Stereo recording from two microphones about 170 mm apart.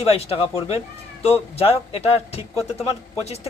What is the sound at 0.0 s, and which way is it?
Speech, 35° left (ahead or behind).